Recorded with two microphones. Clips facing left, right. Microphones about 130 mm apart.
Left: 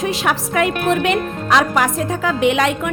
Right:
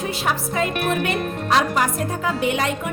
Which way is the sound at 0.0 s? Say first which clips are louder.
Left 4 dB; 90° left.